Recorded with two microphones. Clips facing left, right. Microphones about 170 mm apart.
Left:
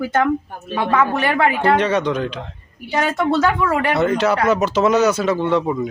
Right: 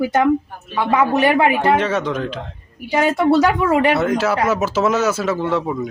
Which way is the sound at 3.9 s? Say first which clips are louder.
Left 1 dB; centre (ahead or behind).